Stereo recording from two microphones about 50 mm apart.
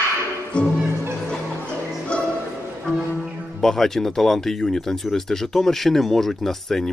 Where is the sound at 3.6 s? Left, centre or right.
Centre.